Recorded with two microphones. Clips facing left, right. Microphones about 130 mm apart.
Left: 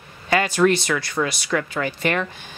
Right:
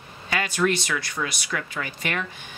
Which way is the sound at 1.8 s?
35° left (ahead or behind).